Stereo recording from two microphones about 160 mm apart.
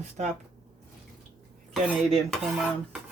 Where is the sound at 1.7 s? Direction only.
Centre (ahead or behind).